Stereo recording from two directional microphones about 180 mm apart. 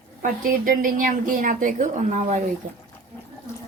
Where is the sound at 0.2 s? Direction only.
50° right (ahead or behind).